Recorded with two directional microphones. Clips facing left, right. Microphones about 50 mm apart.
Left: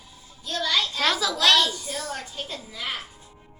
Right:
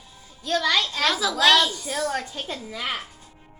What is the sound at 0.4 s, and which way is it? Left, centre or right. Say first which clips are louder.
Speech: right 3 dB; right.